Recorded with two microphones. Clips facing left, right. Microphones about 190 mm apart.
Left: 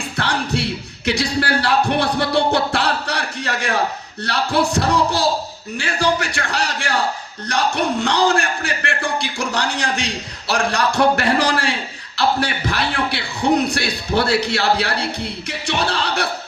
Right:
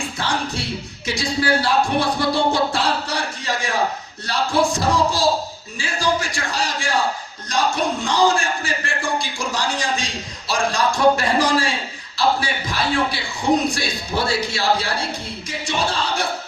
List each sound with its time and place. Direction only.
0.2 s music: 65° left (ahead or behind)
1.0 s a man's voice: 65° left (ahead or behind)